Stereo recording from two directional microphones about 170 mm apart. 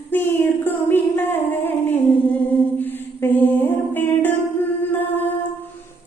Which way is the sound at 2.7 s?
10° left (ahead or behind).